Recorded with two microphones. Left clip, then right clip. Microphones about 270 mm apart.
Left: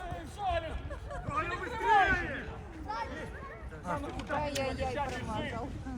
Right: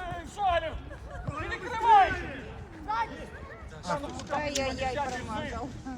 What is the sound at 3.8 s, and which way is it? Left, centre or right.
Speech, right.